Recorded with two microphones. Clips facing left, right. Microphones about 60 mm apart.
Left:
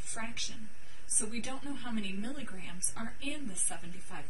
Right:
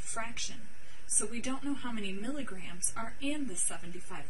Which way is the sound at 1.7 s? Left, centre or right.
Centre.